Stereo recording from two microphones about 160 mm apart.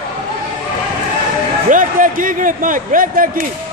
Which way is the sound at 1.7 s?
55° right (ahead or behind).